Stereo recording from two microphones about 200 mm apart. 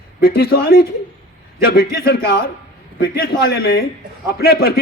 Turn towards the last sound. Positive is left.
turn(degrees=50)  # may be behind; listen again after turning